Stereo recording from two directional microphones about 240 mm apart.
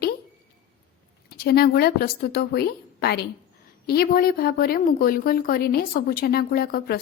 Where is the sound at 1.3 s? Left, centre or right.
Left.